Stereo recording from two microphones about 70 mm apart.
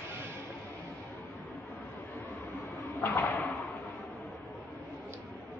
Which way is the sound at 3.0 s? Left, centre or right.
Left.